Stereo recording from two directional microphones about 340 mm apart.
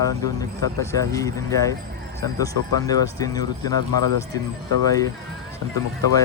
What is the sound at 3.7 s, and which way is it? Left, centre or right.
Speech, right.